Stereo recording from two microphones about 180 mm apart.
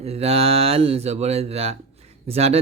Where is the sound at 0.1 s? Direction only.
35° right (ahead or behind).